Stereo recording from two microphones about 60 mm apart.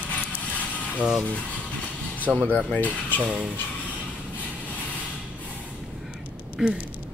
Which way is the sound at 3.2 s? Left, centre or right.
Centre.